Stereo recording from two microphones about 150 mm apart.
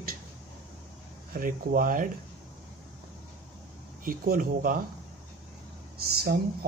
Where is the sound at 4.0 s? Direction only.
70° right (ahead or behind).